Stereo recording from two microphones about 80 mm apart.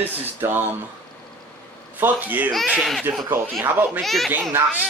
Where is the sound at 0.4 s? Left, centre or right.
Right.